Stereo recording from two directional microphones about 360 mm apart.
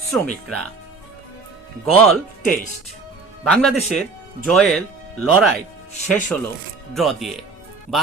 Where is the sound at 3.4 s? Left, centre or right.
Centre.